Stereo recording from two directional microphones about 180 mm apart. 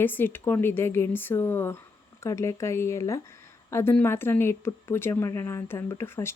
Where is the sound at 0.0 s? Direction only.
10° left (ahead or behind).